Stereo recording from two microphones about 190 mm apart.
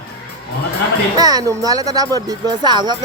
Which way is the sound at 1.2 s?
20° right (ahead or behind).